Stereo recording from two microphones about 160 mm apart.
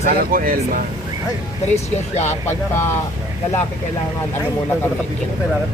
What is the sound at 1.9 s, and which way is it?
Speech, 45° left (ahead or behind).